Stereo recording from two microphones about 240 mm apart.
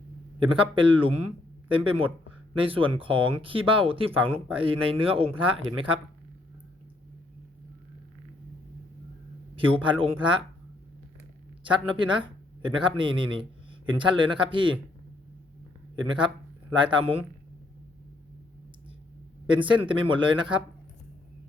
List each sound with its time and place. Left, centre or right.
0.3 s speech: right
9.7 s speech: right
11.6 s speech: right
16.0 s speech: centre
19.5 s speech: centre